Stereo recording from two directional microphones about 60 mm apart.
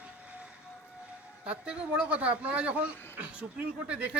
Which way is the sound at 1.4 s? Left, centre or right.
Centre.